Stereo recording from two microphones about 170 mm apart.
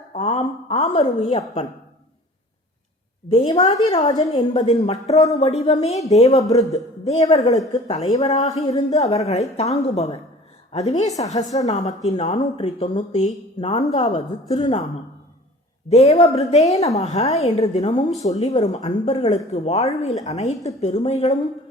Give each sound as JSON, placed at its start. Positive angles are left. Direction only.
{"t": 0.1, "sound": "a sound", "side_deg": 40}
{"t": 3.2, "sound": "a woman's voice", "side_deg": 35}
{"t": 3.5, "sound": "a woman's voice", "side_deg": 20}
{"t": 3.8, "sound": "a woman's voice", "side_deg": 35}
{"t": 4.1, "sound": "a woman's voice", "side_deg": 25}
{"t": 4.7, "sound": "a woman's voice", "side_deg": 40}
{"t": 15.9, "sound": "a woman's voice", "side_deg": 40}